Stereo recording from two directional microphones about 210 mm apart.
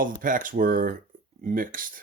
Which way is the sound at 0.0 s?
40° right (ahead or behind).